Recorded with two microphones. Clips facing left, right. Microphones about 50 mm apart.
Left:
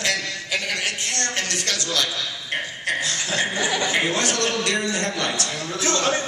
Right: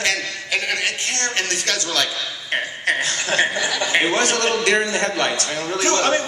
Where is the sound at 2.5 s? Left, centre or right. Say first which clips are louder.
Right 5 dB; right.